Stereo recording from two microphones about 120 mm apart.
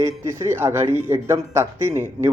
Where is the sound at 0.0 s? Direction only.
25° right (ahead or behind).